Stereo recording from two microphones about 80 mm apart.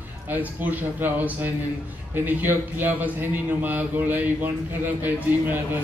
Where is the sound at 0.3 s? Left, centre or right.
Right.